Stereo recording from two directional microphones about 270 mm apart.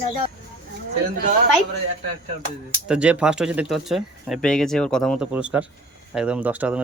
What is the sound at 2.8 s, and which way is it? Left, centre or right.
Speech, centre.